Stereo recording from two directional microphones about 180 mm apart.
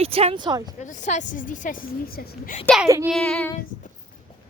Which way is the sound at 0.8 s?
45° left (ahead or behind).